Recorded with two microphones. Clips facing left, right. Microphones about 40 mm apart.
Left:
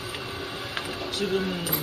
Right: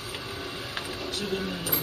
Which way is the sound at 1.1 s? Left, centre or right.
Left.